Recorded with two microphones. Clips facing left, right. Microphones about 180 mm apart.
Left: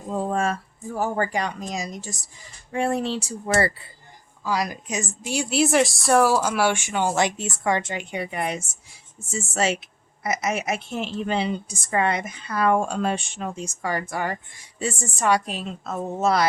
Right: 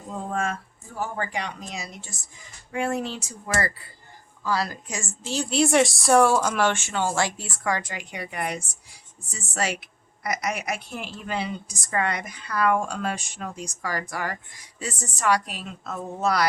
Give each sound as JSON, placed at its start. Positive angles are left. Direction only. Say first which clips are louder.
{"t": 0.2, "sound": "speech", "louder": "left 4 dB", "side_deg": 35}
{"t": 4.4, "sound": "a woman's voice", "louder": "left 1 dB", "side_deg": 15}